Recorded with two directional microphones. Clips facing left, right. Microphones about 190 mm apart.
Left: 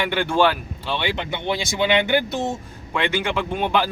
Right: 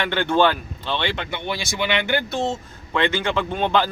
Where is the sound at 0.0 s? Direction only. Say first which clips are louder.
Even; 10° left (ahead or behind).